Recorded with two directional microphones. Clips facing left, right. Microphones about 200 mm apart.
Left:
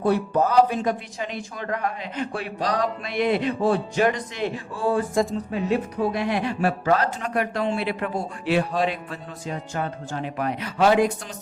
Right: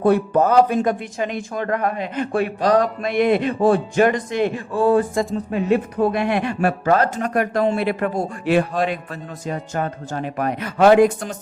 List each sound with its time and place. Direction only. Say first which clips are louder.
0.0 s speech: right 5 dB; 55° right (ahead or behind)
5.2 s speech: even; centre (ahead or behind)
5.5 s speech: right 5 dB; 55° right (ahead or behind)